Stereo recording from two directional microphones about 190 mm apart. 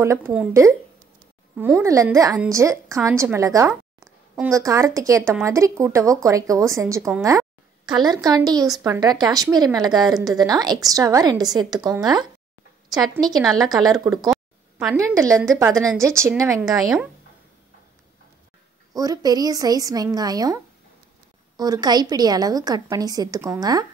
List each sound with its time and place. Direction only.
0.0 s a woman's voice: 15° right (ahead or behind)
13.6 s speech: 20° right (ahead or behind)
14.3 s a sound: 5° right (ahead or behind)
15.0 s speech: 15° right (ahead or behind)
16.6 s speech: centre (ahead or behind)
18.9 s speech: 20° right (ahead or behind)